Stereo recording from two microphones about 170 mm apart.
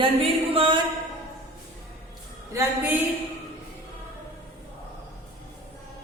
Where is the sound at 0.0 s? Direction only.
30° right (ahead or behind).